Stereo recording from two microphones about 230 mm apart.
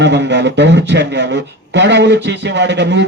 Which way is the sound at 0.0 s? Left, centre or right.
Right.